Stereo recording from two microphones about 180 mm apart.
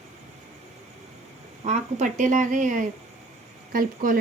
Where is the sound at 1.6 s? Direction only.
45° right (ahead or behind).